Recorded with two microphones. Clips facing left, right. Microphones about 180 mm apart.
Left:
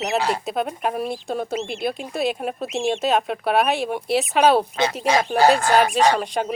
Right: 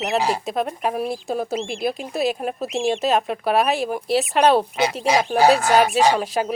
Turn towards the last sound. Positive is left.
turn(degrees=-5)  # may be behind; listen again after turning